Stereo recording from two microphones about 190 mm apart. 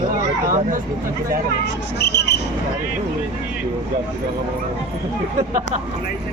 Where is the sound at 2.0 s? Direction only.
60° left (ahead or behind).